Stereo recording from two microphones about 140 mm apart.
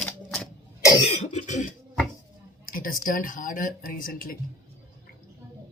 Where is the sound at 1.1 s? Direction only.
55° left (ahead or behind).